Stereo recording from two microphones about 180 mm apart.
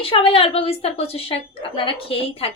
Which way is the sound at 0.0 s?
30° left (ahead or behind).